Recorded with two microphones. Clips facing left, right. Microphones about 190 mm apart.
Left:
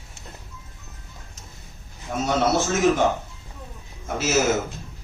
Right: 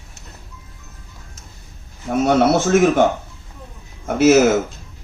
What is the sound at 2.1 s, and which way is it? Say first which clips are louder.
Speech: right 7 dB; 60° right (ahead or behind).